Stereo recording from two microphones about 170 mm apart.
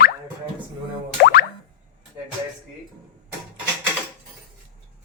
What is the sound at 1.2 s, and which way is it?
Music, 60° left (ahead or behind).